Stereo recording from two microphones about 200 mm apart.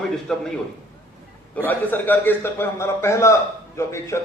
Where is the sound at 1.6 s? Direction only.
10° left (ahead or behind).